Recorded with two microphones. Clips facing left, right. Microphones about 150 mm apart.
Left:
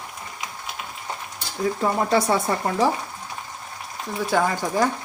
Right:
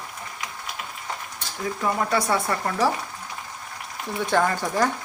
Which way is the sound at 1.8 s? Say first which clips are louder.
Left 2 dB; 25° left (ahead or behind).